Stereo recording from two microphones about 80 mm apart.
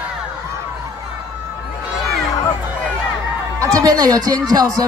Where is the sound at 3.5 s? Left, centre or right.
Right.